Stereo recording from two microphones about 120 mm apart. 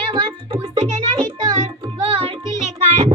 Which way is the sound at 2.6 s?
65° right (ahead or behind).